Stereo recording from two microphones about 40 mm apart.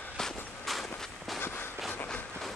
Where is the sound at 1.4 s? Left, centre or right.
Left.